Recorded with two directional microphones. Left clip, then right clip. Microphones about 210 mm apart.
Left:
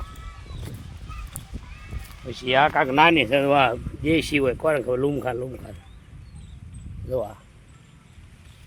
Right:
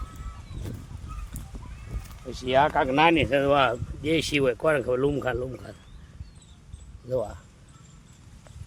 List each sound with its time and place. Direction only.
2.3 s speech: 20° left (ahead or behind)
7.1 s speech: 15° left (ahead or behind)